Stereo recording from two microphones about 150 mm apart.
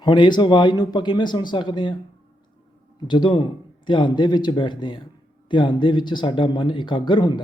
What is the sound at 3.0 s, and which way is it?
A man's voice, 30° left (ahead or behind).